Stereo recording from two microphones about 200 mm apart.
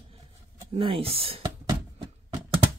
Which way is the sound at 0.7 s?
30° right (ahead or behind).